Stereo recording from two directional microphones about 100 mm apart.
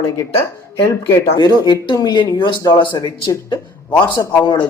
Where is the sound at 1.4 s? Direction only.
40° left (ahead or behind).